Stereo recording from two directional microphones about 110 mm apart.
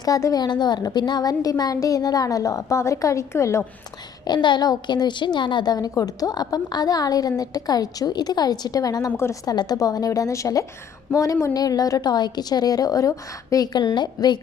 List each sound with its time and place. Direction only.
0.0 s a woman's voice: 30° left (ahead or behind)
4.3 s a woman's voice: 40° left (ahead or behind)
13.7 s a woman's voice: 40° left (ahead or behind)